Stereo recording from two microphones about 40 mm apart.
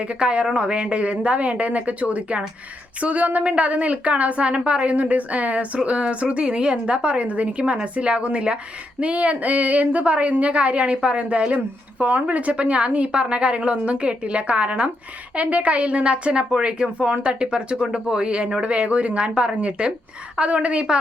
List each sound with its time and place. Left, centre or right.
0.0 s a woman's voice: right